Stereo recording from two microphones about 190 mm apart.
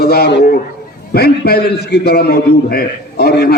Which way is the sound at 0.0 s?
55° left (ahead or behind).